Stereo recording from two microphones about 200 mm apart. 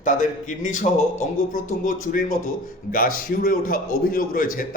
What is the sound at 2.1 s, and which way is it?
A man's voice, 45° left (ahead or behind).